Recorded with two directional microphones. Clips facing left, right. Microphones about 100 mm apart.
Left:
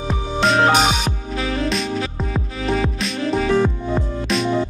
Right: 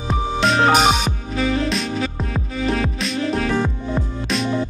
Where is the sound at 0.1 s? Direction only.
Centre (ahead or behind).